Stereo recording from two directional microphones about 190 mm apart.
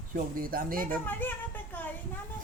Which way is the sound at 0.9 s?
10° left (ahead or behind).